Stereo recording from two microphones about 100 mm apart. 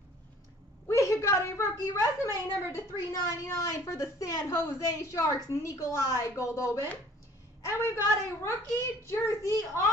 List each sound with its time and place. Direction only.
0.8 s a woman's voice: 30° left (ahead or behind)